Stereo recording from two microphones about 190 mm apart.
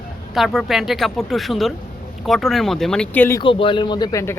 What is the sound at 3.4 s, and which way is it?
A man's voice, 25° left (ahead or behind).